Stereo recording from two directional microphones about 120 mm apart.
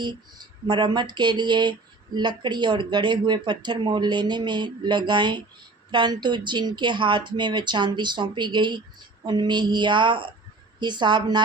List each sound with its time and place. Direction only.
0.0 s speech: 40° right (ahead or behind)